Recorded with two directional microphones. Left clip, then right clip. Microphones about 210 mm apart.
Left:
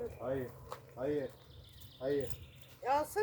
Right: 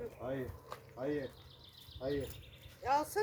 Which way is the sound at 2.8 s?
5° right (ahead or behind).